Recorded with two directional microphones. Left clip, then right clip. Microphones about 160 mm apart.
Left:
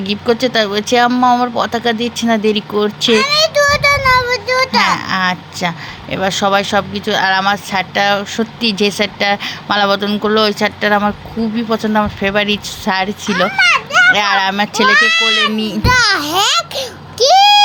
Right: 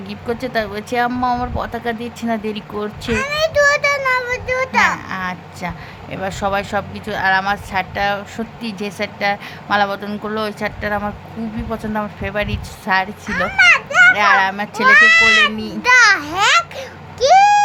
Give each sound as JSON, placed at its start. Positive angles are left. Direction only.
{"t": 0.1, "sound": "speech", "side_deg": 20}
{"t": 15.8, "sound": "a child's voice", "side_deg": 40}